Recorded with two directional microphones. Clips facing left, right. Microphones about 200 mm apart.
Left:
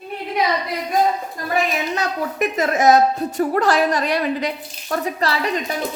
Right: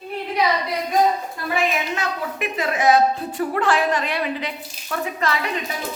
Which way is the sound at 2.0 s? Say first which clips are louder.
Left 4 dB; 40° left (ahead or behind).